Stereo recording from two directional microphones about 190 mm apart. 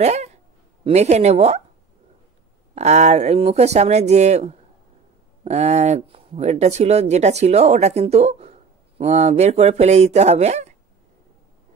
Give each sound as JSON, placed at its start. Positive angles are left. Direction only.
{"t": 0.0, "sound": "a sound", "side_deg": -35}
{"t": 0.8, "sound": "speech", "side_deg": -35}
{"t": 2.7, "sound": "speech", "side_deg": -35}